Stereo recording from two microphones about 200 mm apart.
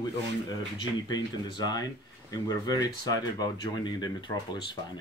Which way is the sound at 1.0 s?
20° left (ahead or behind).